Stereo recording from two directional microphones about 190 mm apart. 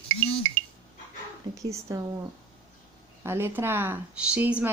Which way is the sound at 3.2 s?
10° right (ahead or behind).